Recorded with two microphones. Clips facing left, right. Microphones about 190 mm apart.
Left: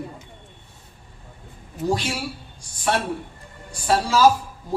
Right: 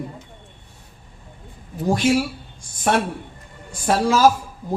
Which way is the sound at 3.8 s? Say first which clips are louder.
Right 2 dB; 55° right (ahead or behind).